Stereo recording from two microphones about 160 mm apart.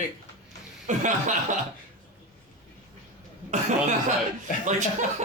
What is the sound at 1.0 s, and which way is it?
Speech, 50° right (ahead or behind).